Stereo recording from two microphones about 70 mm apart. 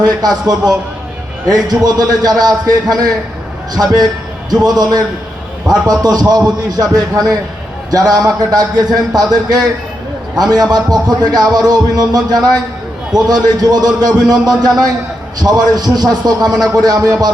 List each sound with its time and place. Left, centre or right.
0.0 s a man's voice: right